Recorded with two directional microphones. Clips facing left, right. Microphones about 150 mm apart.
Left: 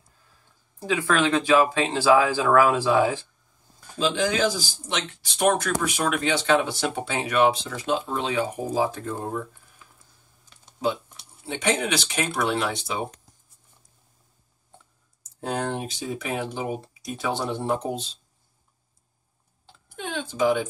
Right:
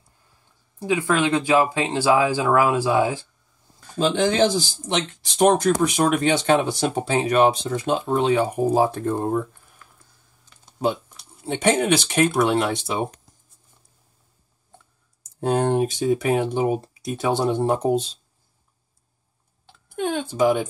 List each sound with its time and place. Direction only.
0.8 s speech: 15° right (ahead or behind)
4.1 s speech: 25° right (ahead or behind); by 9.4 s 50° right (ahead or behind)
11.5 s speech: 50° right (ahead or behind)
15.4 s speech: 45° right (ahead or behind)
20.0 s speech: 50° right (ahead or behind)